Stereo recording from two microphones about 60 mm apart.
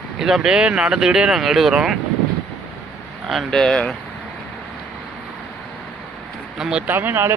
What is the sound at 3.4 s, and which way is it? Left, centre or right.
Speech, centre.